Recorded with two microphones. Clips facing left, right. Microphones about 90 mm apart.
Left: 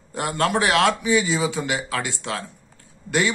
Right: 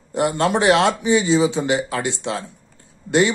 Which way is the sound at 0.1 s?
20° right (ahead or behind).